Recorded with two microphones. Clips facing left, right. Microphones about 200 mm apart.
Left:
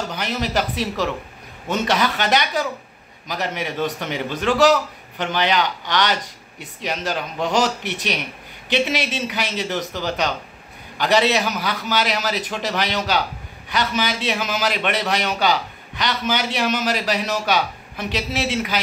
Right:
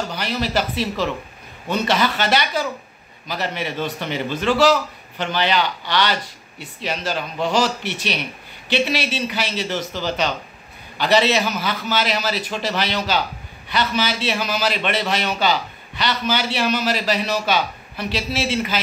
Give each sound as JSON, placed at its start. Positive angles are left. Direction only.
{"t": 0.1, "sound": "a man's voice", "side_deg": 15}